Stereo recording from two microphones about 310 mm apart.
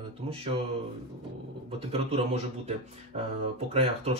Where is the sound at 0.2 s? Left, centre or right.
Centre.